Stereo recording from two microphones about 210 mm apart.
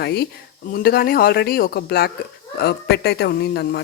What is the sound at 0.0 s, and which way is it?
Speech, 50° left (ahead or behind).